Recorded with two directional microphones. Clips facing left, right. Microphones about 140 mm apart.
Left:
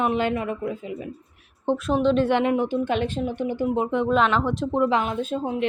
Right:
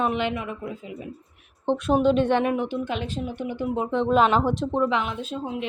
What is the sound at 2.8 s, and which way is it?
Speech, 55° left (ahead or behind).